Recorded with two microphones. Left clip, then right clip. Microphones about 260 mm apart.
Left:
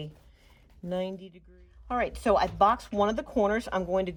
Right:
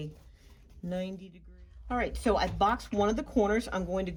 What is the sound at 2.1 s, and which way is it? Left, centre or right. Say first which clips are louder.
Speech: left 5 dB; left.